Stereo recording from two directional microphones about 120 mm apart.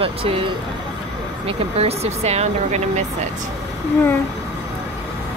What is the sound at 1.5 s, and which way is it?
Speech, 60° right (ahead or behind).